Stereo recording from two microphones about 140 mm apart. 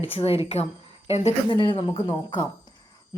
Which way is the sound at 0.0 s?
40° left (ahead or behind).